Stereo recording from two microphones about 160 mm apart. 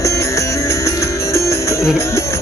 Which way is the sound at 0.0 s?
20° left (ahead or behind).